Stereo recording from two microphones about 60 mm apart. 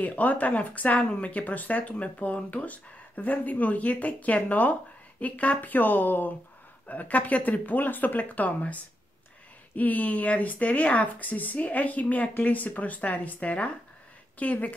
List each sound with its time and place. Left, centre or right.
0.0 s speech: left
9.8 s speech: left